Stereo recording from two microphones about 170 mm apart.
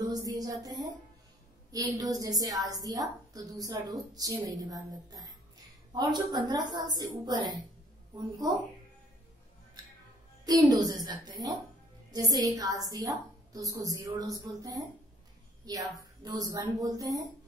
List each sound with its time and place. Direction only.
0.0 s a woman's voice: 20° right (ahead or behind)
10.4 s a woman's voice: 25° right (ahead or behind)